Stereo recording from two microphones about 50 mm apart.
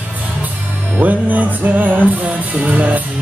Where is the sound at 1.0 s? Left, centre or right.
Right.